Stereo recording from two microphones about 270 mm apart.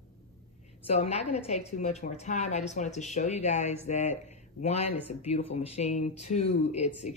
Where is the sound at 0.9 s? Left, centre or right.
Left.